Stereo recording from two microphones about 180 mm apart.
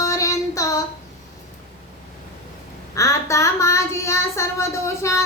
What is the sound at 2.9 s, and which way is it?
Child singing, 15° left (ahead or behind).